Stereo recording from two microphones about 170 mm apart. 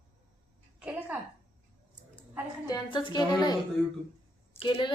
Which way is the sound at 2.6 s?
25° left (ahead or behind).